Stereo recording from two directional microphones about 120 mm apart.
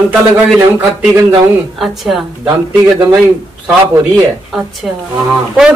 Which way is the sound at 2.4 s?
20° right (ahead or behind).